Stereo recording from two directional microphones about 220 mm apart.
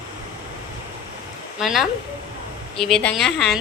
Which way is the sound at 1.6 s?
Centre (ahead or behind).